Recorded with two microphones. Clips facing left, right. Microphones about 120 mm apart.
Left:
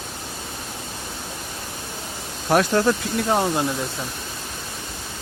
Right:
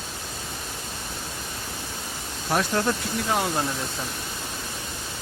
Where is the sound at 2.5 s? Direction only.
65° left (ahead or behind).